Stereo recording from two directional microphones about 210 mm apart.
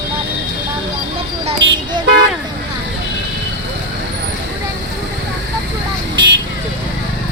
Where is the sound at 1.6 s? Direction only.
60° right (ahead or behind).